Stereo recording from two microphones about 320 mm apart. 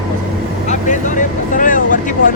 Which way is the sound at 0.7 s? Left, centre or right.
Left.